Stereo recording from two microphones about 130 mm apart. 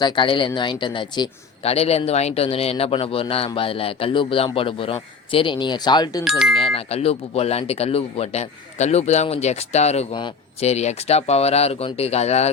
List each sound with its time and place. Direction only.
0.0 s speech: 40° left (ahead or behind)
1.6 s a man's voice: 50° left (ahead or behind); by 6.2 s 30° left (ahead or behind)
6.2 s speech: 5° right (ahead or behind)
6.7 s a man's voice: 50° left (ahead or behind)